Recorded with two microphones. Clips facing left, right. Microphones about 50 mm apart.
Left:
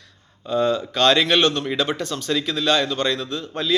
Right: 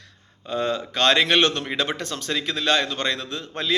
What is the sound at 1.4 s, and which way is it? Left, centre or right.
Speech, right.